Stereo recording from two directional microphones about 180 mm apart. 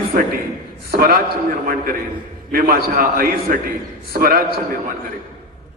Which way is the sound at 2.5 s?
55° right (ahead or behind).